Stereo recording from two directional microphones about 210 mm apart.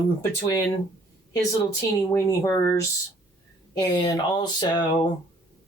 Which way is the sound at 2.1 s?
15° left (ahead or behind).